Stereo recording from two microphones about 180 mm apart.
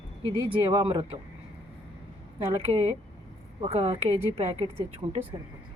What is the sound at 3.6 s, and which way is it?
Speech, 35° right (ahead or behind).